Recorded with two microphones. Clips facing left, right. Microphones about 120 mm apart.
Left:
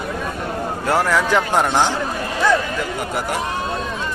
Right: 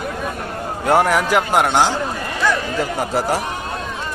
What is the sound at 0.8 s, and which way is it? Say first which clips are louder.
A man's voice: right 3 dB; 20° right (ahead or behind).